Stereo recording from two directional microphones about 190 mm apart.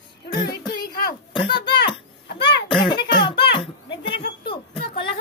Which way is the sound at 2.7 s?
25° left (ahead or behind).